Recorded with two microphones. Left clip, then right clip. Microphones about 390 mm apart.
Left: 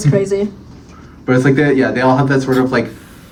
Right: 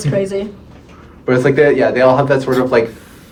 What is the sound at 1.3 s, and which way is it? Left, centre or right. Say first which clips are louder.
Speech: right 2 dB; centre.